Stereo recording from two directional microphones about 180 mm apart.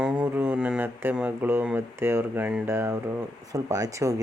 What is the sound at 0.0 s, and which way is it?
Speech, 10° right (ahead or behind).